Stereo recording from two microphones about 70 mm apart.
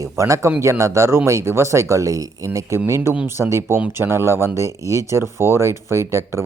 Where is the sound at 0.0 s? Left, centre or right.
Right.